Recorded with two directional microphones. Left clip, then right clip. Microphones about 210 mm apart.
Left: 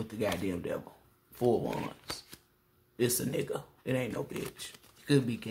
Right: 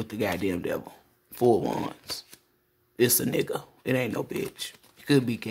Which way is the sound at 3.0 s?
35° right (ahead or behind).